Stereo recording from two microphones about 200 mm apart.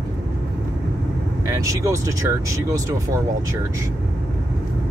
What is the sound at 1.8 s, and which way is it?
Speech, 15° right (ahead or behind).